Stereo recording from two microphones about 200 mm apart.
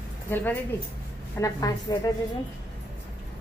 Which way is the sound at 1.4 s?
15° left (ahead or behind).